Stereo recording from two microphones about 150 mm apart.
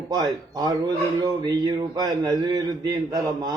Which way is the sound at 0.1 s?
25° right (ahead or behind).